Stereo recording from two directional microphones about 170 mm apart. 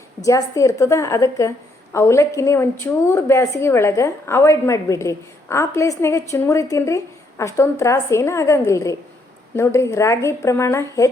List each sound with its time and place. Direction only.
0.2 s a woman's voice: 20° left (ahead or behind)